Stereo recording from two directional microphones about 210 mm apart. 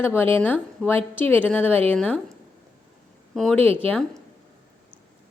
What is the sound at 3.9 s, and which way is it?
Speech, 5° left (ahead or behind).